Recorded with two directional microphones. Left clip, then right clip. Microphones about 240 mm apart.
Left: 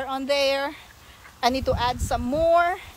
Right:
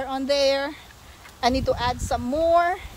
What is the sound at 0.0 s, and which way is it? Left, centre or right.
A woman's voice, centre.